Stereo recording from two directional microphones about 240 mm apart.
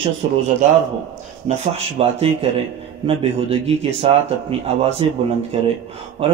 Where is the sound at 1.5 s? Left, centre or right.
Right.